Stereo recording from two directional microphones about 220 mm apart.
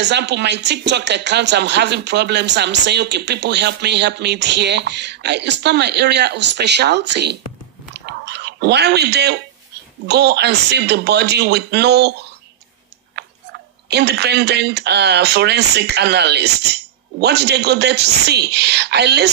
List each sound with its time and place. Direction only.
0.0 s speech: 50° right (ahead or behind)
7.9 s a sound: 50° right (ahead or behind)
10.0 s speech: 50° right (ahead or behind)
13.1 s speech: 50° right (ahead or behind)